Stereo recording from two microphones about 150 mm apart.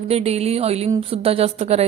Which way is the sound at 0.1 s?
45° right (ahead or behind).